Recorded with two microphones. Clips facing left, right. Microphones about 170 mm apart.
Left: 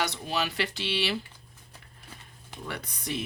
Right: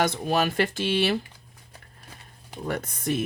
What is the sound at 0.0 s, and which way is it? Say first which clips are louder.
Speech: right 7 dB; 50° right (ahead or behind).